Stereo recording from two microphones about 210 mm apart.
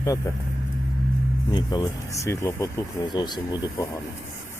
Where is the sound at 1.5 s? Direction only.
15° left (ahead or behind).